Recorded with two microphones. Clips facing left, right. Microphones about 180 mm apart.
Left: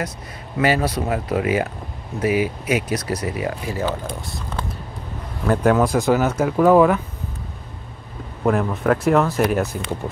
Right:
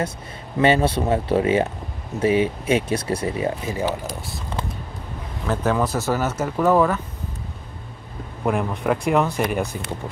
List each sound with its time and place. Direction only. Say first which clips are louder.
0.6 s speech: right 2 dB; 25° right (ahead or behind)
5.7 s speech: left 5 dB; 5° left (ahead or behind)
8.5 s speech: left 3 dB; centre (ahead or behind)